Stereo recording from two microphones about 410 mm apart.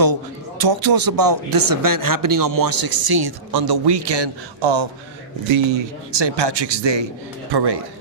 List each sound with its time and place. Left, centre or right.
0.6 s a man's voice: right
7.5 s speech: right